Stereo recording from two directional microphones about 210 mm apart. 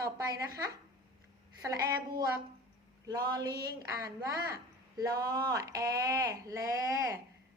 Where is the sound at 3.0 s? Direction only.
20° right (ahead or behind).